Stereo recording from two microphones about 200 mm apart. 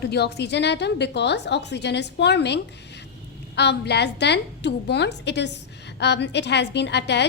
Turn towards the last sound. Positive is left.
turn(degrees=60)  # may be behind; listen again after turning